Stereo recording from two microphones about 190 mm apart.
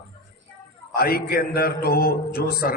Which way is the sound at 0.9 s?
50° left (ahead or behind).